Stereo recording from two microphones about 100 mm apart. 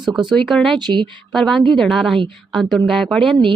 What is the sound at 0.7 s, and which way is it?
Speech, 50° right (ahead or behind).